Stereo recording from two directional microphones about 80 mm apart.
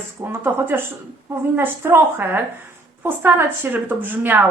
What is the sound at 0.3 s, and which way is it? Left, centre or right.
A woman's voice, right.